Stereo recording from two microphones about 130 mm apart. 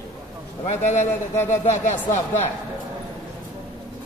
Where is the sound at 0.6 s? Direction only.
60° left (ahead or behind).